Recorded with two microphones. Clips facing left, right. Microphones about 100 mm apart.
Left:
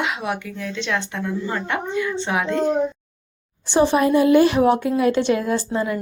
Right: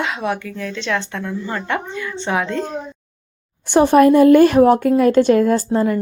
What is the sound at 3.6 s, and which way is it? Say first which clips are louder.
A woman's voice: right 6 dB; 55° right (ahead or behind).